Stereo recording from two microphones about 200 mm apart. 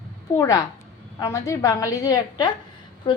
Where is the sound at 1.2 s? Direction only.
15° left (ahead or behind).